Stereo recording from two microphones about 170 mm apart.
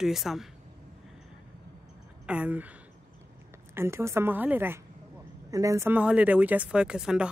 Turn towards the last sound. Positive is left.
turn(degrees=-5)  # may be behind; listen again after turning